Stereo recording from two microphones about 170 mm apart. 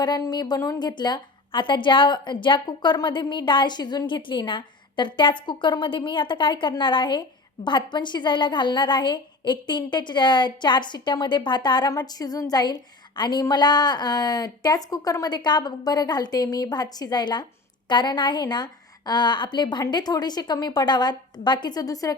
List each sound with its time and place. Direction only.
0.0 s a woman's voice: 25° left (ahead or behind)